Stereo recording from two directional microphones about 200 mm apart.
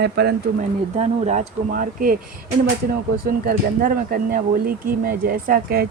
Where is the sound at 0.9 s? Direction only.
35° right (ahead or behind).